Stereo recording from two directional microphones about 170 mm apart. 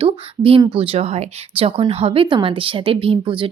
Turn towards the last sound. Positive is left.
turn(degrees=-30)  # may be behind; listen again after turning